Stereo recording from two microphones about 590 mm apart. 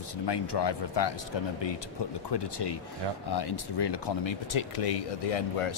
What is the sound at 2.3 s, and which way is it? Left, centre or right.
Speech, left.